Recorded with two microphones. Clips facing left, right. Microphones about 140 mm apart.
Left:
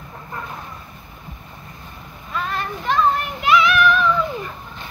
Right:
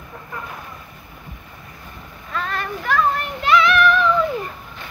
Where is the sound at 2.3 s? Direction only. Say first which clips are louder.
Even; 20° left (ahead or behind).